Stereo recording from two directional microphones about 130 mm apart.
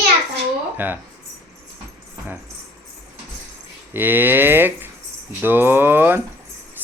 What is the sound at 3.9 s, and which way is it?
Speech, 15° right (ahead or behind).